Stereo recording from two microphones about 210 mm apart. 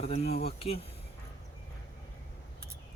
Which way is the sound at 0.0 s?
30° left (ahead or behind).